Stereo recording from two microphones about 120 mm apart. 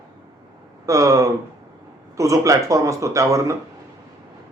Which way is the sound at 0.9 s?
25° right (ahead or behind).